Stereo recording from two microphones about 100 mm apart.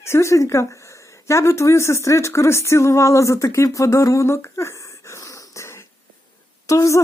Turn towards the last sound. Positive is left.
turn(degrees=30)  # may be behind; listen again after turning